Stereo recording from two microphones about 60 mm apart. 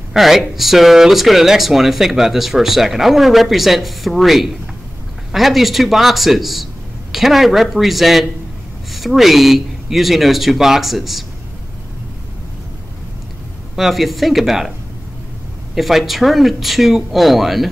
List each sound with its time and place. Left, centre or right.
0.1 s speech: centre
13.7 s speech: centre
15.7 s speech: centre